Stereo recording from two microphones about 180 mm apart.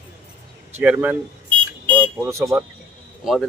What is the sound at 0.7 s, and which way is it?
Speech, 10° right (ahead or behind).